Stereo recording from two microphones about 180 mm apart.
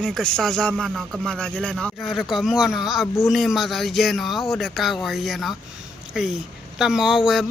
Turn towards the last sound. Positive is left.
turn(degrees=0)  # may be behind; listen again after turning